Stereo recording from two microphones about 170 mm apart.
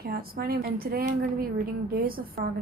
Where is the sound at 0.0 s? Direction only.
65° right (ahead or behind).